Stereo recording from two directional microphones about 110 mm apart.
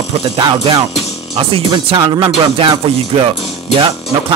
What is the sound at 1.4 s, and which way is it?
Speech, 55° right (ahead or behind).